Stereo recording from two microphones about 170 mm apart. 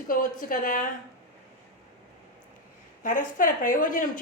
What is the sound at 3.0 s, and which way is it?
A woman's voice, 50° left (ahead or behind).